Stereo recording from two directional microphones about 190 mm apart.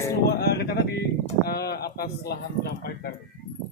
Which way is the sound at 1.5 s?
55° left (ahead or behind).